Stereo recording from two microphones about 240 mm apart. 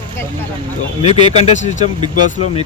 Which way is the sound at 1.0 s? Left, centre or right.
Left.